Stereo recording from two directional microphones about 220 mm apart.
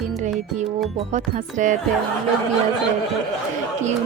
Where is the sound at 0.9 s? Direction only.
35° right (ahead or behind).